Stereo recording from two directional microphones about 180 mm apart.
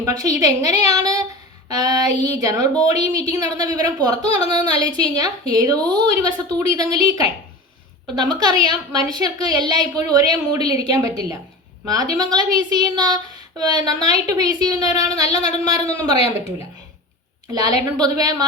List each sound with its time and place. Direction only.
0.0 s speech: 20° right (ahead or behind)
13.6 s speech: 25° right (ahead or behind)
16.1 s speech: 35° left (ahead or behind)
17.5 s speech: 20° right (ahead or behind)